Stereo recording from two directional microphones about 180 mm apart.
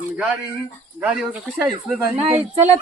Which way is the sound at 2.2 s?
35° right (ahead or behind).